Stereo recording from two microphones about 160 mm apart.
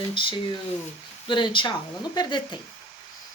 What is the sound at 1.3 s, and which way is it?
Speech, 30° left (ahead or behind).